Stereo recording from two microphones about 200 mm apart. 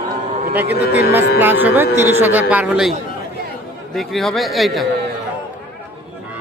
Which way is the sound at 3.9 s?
Centre (ahead or behind).